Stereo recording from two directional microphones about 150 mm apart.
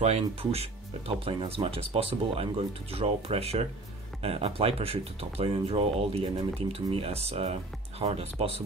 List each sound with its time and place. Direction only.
0.0 s speech: 45° right (ahead or behind)